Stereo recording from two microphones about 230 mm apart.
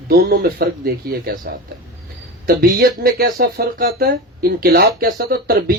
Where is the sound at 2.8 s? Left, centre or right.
Right.